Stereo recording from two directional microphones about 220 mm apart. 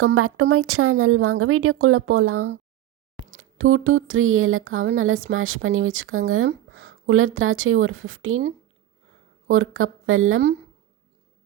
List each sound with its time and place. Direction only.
0.0 s speech: 75° right (ahead or behind)
3.3 s a sound: 65° right (ahead or behind)
5.3 s speech: 65° right (ahead or behind)